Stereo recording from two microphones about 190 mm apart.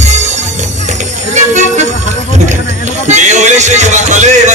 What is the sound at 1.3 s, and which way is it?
Music, 40° right (ahead or behind).